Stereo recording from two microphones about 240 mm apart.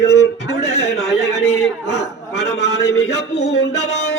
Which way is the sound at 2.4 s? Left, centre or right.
Left.